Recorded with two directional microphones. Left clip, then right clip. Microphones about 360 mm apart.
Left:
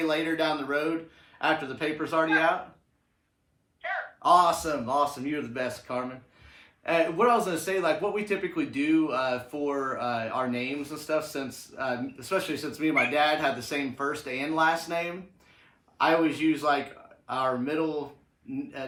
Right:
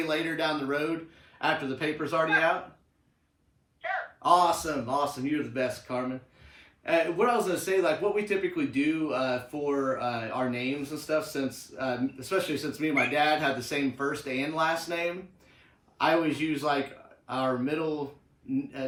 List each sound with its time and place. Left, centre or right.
0.1 s speech: centre
3.8 s a man's voice: centre